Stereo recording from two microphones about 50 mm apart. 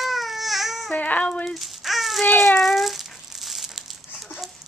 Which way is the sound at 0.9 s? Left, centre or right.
Left.